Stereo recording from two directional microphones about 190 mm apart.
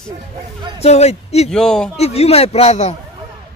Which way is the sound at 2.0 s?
35° left (ahead or behind).